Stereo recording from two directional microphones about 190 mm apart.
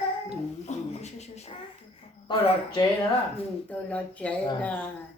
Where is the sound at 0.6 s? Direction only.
35° left (ahead or behind).